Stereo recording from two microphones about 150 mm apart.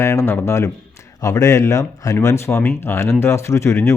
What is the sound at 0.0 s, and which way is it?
A man's voice, 20° left (ahead or behind).